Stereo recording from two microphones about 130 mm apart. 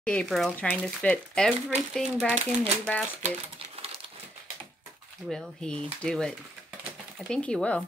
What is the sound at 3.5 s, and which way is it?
Crumpling, 50° right (ahead or behind).